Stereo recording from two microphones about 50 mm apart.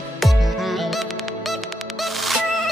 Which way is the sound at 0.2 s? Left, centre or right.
Centre.